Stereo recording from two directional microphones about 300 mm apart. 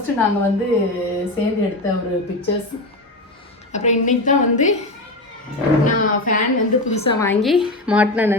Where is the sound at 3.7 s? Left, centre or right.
Left.